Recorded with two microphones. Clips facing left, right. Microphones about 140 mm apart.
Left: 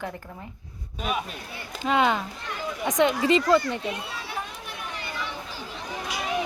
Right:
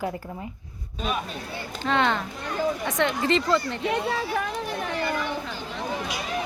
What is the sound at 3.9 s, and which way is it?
Speech, 75° right (ahead or behind).